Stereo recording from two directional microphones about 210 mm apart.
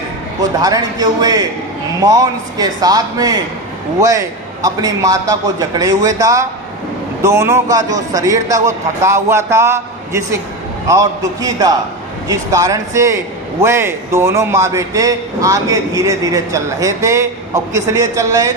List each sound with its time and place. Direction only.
0.6 s a man's voice: 20° right (ahead or behind)
4.6 s a man's voice: 15° right (ahead or behind)